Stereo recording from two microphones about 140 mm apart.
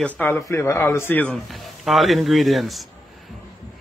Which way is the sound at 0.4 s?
20° left (ahead or behind).